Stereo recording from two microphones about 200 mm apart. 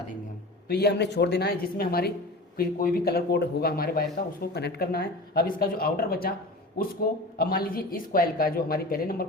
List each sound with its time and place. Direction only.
0.7 s speech: 55° left (ahead or behind)